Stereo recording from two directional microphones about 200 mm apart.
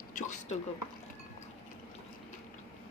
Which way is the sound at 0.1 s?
40° left (ahead or behind).